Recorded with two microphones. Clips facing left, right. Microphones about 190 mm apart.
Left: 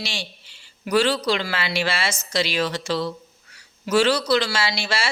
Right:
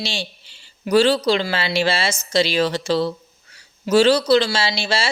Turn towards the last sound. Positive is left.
turn(degrees=-25)  # may be behind; listen again after turning